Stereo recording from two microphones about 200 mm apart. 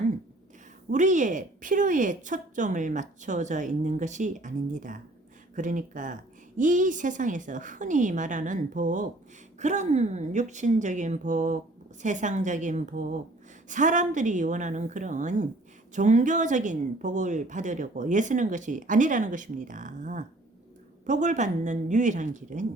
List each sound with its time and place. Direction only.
0.9 s a woman's voice: 40° right (ahead or behind)